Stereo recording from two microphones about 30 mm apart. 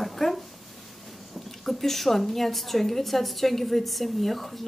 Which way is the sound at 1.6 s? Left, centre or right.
Centre.